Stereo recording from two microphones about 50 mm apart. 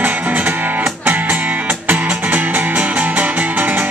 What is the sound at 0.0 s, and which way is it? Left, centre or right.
Music, right.